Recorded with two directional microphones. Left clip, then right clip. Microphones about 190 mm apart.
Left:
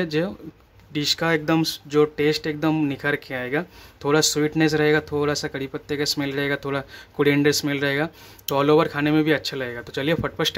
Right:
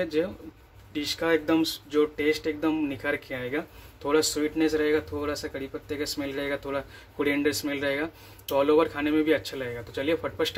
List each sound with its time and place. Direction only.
0.0 s speech: 35° left (ahead or behind)